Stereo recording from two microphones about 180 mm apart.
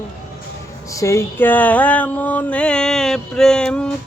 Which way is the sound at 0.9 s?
15° left (ahead or behind).